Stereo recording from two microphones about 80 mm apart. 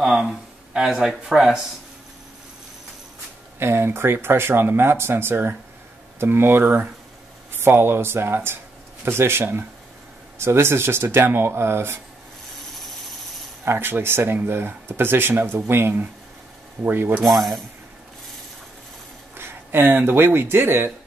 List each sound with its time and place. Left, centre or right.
0.0 s speech: centre
3.5 s speech: right
12.7 s vehicle: centre
13.7 s speech: right
17.2 s a sound: centre
19.3 s speech: right